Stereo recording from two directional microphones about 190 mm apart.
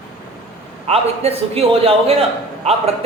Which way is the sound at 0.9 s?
30° right (ahead or behind).